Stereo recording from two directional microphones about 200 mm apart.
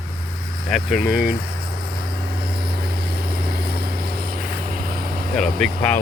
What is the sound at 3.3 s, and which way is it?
Vehicle, 50° right (ahead or behind).